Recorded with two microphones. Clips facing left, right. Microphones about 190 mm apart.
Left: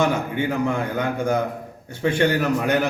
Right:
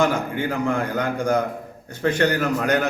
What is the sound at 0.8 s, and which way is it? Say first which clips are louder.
Speech: even; 20° left (ahead or behind).